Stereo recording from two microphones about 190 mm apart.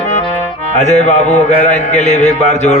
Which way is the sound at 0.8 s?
35° left (ahead or behind).